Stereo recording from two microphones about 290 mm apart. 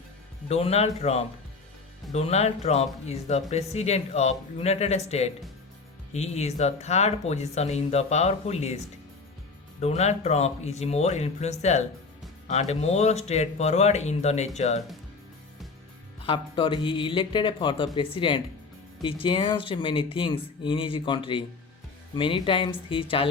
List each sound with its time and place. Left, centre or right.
0.4 s speech: left
9.8 s speech: left
16.2 s speech: centre